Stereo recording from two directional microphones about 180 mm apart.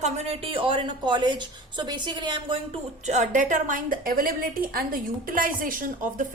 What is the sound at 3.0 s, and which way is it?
A woman's voice, 40° right (ahead or behind).